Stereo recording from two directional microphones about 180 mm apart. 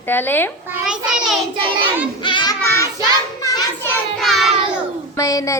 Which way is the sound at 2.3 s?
25° left (ahead or behind).